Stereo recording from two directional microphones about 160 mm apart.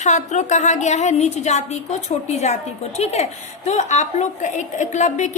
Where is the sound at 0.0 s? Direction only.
45° left (ahead or behind).